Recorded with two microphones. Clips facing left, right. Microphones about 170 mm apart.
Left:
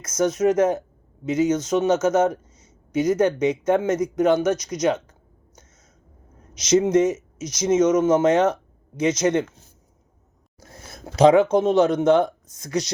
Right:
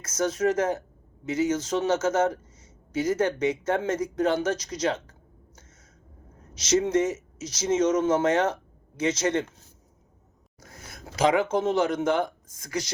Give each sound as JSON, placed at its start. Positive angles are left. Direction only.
{"t": 0.0, "sound": "a man's voice", "side_deg": 20}
{"t": 6.5, "sound": "a man's voice", "side_deg": 15}
{"t": 11.3, "sound": "a man's voice", "side_deg": 20}